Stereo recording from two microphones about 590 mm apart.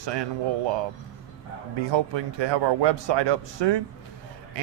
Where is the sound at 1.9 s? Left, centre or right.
Right.